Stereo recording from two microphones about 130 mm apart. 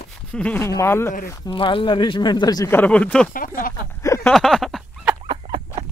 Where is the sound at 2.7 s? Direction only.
10° left (ahead or behind).